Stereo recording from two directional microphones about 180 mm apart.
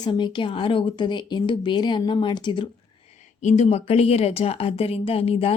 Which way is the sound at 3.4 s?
40° left (ahead or behind).